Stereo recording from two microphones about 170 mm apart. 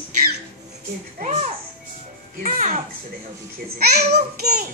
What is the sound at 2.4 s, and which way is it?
Speech, 45° right (ahead or behind).